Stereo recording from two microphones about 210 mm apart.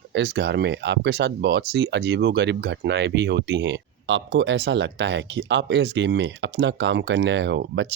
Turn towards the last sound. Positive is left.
turn(degrees=-60)  # may be behind; listen again after turning